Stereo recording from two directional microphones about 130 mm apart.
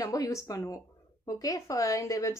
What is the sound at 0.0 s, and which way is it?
A woman's voice, 25° left (ahead or behind).